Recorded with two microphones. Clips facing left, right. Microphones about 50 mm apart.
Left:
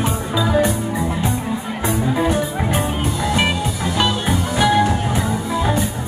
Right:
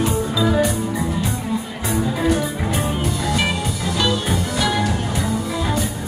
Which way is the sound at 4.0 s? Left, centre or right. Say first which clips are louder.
Left 1 dB; left.